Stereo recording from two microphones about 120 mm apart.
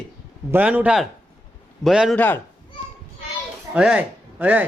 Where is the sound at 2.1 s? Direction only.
15° left (ahead or behind).